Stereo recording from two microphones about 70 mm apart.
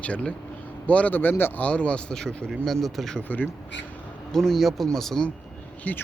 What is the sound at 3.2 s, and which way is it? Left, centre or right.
Speech, left.